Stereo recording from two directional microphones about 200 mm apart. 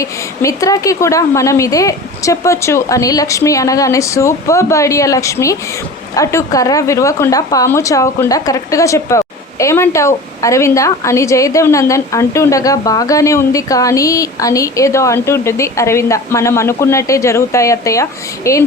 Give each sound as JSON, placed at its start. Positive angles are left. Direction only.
{"t": 0.0, "sound": "a woman's voice", "side_deg": 15}